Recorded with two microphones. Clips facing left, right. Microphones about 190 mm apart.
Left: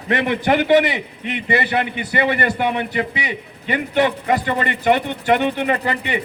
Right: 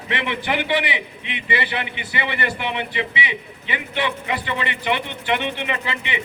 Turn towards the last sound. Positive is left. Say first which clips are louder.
# left 6 dB
turn(degrees=45)  # may be behind; listen again after turning